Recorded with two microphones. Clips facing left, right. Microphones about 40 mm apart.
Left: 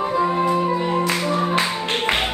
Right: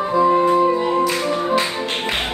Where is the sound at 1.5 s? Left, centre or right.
Left.